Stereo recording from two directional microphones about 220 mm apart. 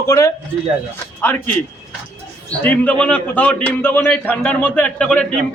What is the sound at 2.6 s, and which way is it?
A man's voice, 5° left (ahead or behind).